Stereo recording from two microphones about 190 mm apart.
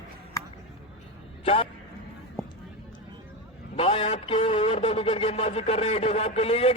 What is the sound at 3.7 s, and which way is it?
A man's voice, 30° left (ahead or behind).